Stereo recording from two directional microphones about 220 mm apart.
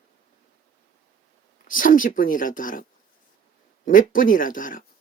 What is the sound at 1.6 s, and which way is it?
Speech, 40° left (ahead or behind).